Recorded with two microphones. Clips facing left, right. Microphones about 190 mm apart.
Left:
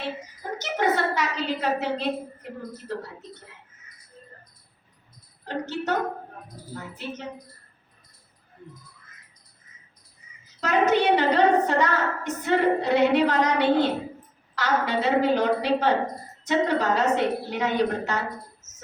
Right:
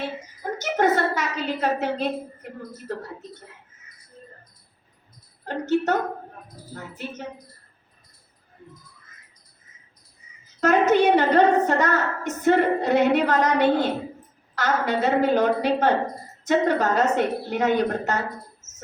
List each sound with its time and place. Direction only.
0.6 s a woman's voice: 50° right (ahead or behind)
5.5 s a woman's voice: 45° right (ahead or behind)
10.6 s a woman's voice: 45° right (ahead or behind)